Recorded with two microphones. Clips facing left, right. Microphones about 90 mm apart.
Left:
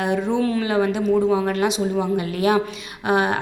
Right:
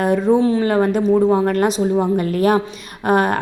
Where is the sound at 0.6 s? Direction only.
45° right (ahead or behind).